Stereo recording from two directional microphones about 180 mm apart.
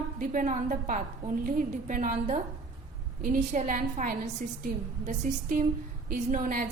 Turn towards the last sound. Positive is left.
turn(degrees=-50)  # may be behind; listen again after turning